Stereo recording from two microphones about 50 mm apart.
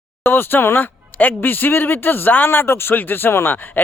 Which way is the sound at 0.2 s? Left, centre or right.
Left.